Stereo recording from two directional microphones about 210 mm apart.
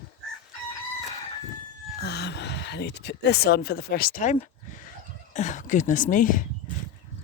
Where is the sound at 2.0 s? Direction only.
55° left (ahead or behind).